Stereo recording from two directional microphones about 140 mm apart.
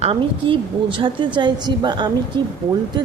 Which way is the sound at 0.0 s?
40° right (ahead or behind).